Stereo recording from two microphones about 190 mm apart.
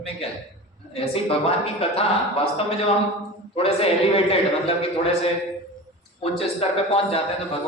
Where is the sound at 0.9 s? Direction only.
30° left (ahead or behind).